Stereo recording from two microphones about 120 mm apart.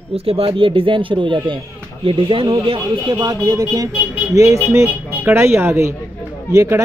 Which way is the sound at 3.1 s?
30° right (ahead or behind).